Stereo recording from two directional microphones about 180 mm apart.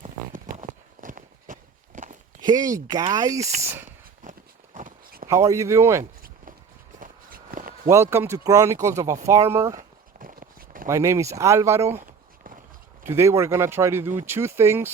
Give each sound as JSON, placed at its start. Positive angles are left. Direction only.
{"t": 0.0, "sound": "a sound", "side_deg": -40}
{"t": 1.0, "sound": "run", "side_deg": -45}
{"t": 1.9, "sound": "walk", "side_deg": -45}
{"t": 2.4, "sound": "speech", "side_deg": -20}
{"t": 4.2, "sound": "a sound", "side_deg": -45}
{"t": 5.3, "sound": "speech", "side_deg": -15}
{"t": 7.0, "sound": "walk", "side_deg": -50}
{"t": 7.9, "sound": "speech", "side_deg": -15}
{"t": 9.7, "sound": "walk", "side_deg": -50}
{"t": 10.8, "sound": "speech", "side_deg": -15}
{"t": 12.0, "sound": "a sound", "side_deg": -50}
{"t": 13.1, "sound": "speech", "side_deg": -15}